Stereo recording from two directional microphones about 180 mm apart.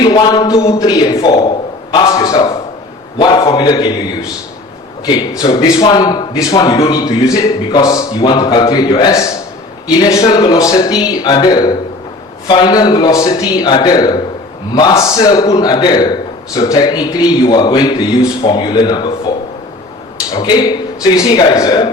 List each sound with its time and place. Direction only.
0.0 s a man's voice: 25° left (ahead or behind)
5.0 s a man's voice: 20° left (ahead or behind)
20.3 s a man's voice: 25° left (ahead or behind)